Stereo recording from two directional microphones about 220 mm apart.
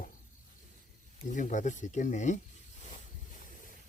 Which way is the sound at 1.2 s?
35° left (ahead or behind).